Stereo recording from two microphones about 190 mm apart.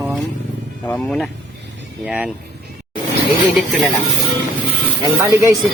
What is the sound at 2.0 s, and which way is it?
Speech, 5° right (ahead or behind).